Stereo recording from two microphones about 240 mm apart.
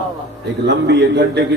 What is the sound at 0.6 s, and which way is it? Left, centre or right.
Speech, right.